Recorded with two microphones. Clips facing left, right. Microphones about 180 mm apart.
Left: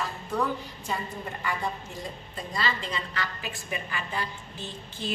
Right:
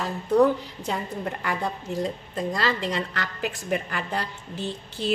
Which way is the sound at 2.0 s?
80° right.